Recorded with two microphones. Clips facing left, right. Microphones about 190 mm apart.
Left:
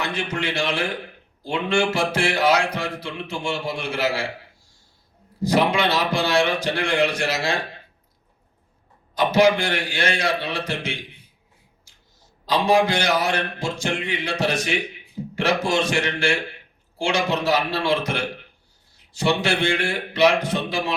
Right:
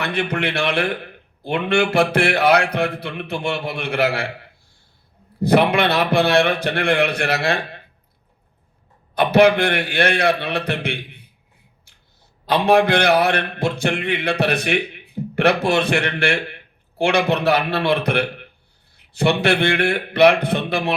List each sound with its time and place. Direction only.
0.0 s speech: 60° right (ahead or behind)
9.1 s speech: 60° right (ahead or behind)
11.9 s a sound: 60° right (ahead or behind)
12.5 s speech: 60° right (ahead or behind)